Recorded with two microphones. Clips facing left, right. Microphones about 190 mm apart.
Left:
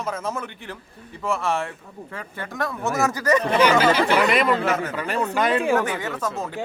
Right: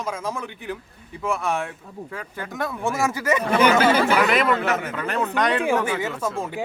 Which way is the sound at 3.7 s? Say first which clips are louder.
Even; centre (ahead or behind).